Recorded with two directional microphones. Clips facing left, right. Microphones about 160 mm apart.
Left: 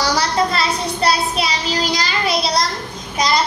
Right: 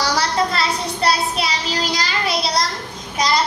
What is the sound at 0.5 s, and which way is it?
Child singing, 15° left (ahead or behind).